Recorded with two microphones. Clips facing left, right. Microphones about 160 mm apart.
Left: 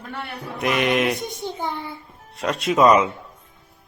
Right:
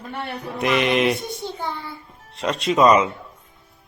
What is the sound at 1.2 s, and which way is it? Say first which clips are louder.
Speech: left 1 dB; 15° left (ahead or behind).